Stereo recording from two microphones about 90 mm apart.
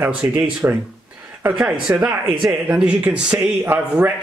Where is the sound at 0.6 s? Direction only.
20° right (ahead or behind).